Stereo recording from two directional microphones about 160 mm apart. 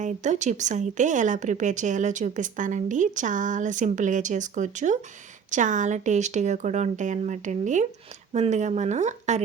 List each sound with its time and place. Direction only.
0.0 s speech: 50° right (ahead or behind)